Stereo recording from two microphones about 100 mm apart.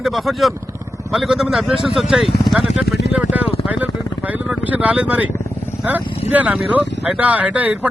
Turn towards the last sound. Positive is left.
turn(degrees=-15)  # may be behind; listen again after turning